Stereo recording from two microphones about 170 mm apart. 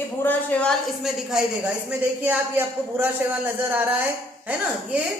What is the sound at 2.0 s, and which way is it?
A man's voice, 10° right (ahead or behind).